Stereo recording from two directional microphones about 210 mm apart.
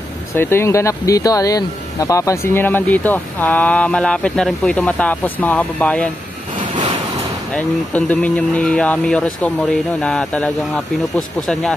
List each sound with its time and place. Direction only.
0.3 s speech: 10° left (ahead or behind)
6.7 s vehicle: 25° right (ahead or behind)
7.5 s speech: 5° left (ahead or behind)